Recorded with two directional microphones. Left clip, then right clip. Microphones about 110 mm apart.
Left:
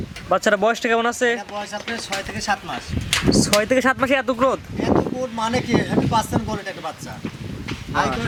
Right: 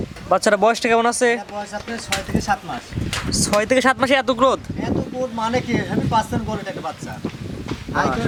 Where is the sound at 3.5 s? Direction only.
10° right (ahead or behind).